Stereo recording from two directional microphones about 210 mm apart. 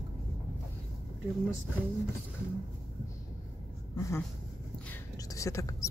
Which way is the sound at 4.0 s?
15° left (ahead or behind).